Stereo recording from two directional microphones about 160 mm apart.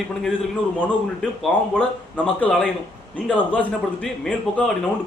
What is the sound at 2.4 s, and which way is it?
A man's voice, 10° left (ahead or behind).